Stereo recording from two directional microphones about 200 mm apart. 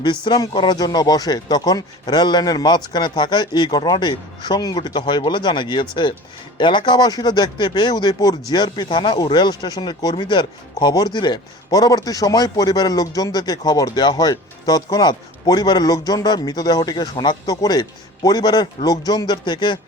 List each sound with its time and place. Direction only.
0.0 s speech: 25° left (ahead or behind)